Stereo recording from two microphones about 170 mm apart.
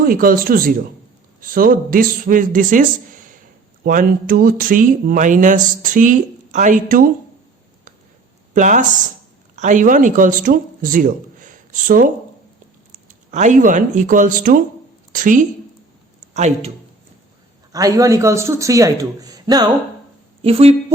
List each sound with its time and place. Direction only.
0.0 s speech: 55° right (ahead or behind)
8.5 s speech: 50° right (ahead or behind)
13.3 s speech: 45° right (ahead or behind)
15.1 s a sound: 50° right (ahead or behind)
16.3 s speech: 40° right (ahead or behind)
17.7 s a man's voice: 20° right (ahead or behind)
20.4 s speech: 35° right (ahead or behind)